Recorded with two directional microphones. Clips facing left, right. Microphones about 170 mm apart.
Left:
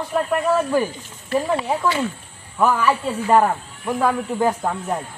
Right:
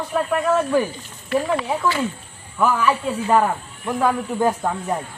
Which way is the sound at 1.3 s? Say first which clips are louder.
Even; 30° left (ahead or behind).